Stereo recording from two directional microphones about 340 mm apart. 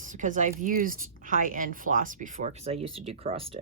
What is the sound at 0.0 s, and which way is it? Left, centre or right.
A woman's voice, right.